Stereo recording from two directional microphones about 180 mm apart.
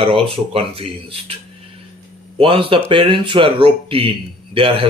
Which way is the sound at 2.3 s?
30° right (ahead or behind).